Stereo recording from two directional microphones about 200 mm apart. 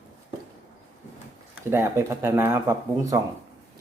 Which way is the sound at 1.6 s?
10° right (ahead or behind).